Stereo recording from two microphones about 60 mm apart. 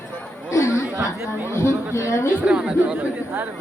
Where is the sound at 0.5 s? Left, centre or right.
Left.